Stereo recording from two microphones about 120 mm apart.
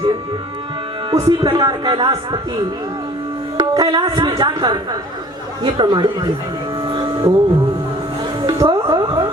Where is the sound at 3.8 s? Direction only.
35° right (ahead or behind).